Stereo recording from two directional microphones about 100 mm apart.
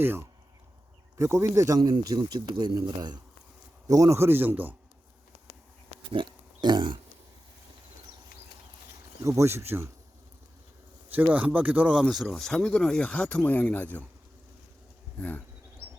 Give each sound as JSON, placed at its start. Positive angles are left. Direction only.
{"t": 0.0, "sound": "speech", "side_deg": -20}
{"t": 1.8, "sound": "speech", "side_deg": -45}
{"t": 6.1, "sound": "speech", "side_deg": -50}
{"t": 9.2, "sound": "speech", "side_deg": -30}
{"t": 11.1, "sound": "speech", "side_deg": -20}
{"t": 12.0, "sound": "speech", "side_deg": 0}
{"t": 15.2, "sound": "speech", "side_deg": 15}